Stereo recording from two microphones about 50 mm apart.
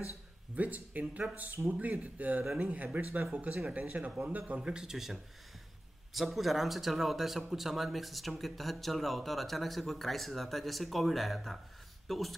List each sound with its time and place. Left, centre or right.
0.6 s speech: right
4.6 s speech: centre